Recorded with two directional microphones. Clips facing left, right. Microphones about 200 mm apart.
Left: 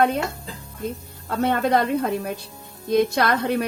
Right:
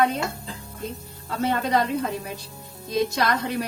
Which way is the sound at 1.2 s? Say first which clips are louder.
Left 4 dB; 55° left (ahead or behind).